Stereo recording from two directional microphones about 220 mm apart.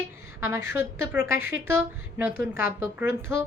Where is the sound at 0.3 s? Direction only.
10° right (ahead or behind).